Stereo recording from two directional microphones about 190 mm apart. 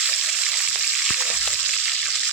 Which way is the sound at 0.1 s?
5° right (ahead or behind).